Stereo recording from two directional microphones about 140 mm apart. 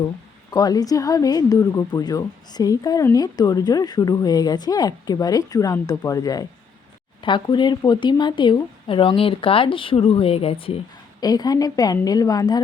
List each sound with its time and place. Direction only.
0.5 s a woman's voice: 25° left (ahead or behind)
11.2 s a woman's voice: 25° left (ahead or behind)